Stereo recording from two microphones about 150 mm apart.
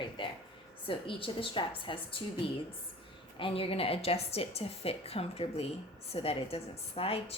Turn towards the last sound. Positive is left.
turn(degrees=40)  # may be behind; listen again after turning